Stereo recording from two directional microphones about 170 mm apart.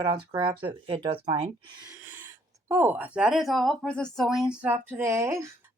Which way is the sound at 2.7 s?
10° right (ahead or behind).